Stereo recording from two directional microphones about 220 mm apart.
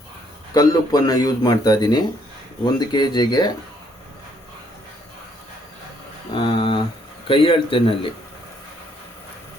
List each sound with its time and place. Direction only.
0.5 s a man's voice: 15° left (ahead or behind)
6.3 s a sound: 20° left (ahead or behind)
7.3 s speech: 25° left (ahead or behind)